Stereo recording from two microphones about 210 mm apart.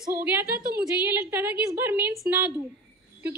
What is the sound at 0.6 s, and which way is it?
Speech, 45° right (ahead or behind).